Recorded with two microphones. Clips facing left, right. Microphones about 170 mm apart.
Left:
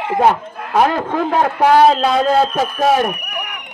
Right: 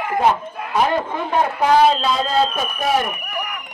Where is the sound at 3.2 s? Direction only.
15° left (ahead or behind).